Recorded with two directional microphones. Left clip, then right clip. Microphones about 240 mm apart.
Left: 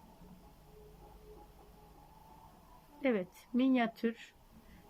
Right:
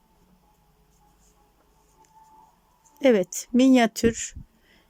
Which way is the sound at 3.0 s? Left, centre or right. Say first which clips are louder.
Right 15 dB; right.